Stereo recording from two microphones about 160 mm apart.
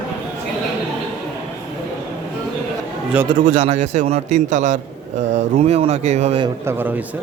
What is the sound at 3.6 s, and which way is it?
A man's voice, 45° right (ahead or behind).